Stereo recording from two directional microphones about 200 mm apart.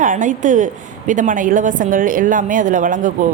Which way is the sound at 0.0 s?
40° right (ahead or behind).